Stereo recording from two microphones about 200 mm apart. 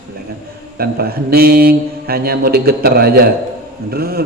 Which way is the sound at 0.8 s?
50° right (ahead or behind).